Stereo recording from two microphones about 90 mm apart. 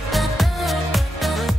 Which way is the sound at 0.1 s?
Centre (ahead or behind).